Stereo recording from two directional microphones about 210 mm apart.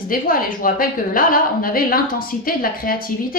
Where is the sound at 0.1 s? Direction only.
40° left (ahead or behind).